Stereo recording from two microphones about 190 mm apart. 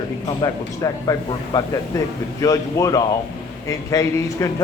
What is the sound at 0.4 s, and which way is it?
A man's voice, 20° left (ahead or behind).